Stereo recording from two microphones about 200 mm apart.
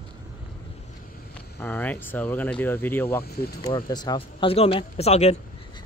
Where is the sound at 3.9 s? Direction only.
20° left (ahead or behind).